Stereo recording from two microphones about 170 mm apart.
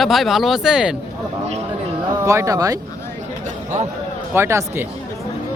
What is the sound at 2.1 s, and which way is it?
Speech, 15° right (ahead or behind).